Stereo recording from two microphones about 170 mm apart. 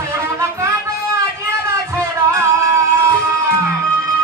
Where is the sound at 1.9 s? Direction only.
15° right (ahead or behind).